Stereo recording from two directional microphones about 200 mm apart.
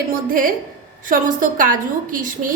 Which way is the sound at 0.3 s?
45° right (ahead or behind).